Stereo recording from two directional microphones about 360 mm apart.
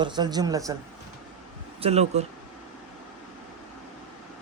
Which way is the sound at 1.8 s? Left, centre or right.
Centre.